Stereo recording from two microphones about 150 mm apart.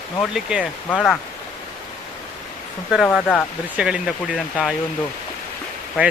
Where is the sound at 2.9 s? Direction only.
Centre (ahead or behind).